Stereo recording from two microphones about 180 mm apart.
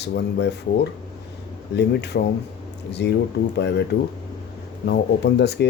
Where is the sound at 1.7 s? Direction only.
70° left (ahead or behind).